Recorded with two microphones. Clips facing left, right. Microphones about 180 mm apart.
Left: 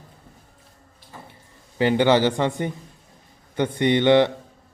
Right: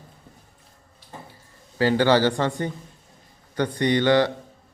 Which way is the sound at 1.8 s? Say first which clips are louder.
Left 1 dB; 20° left (ahead or behind).